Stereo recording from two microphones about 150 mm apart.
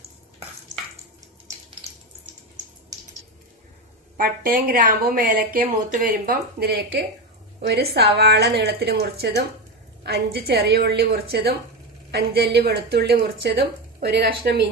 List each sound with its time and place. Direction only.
4.2 s a woman's voice: 70° right (ahead or behind); by 14.7 s 90° right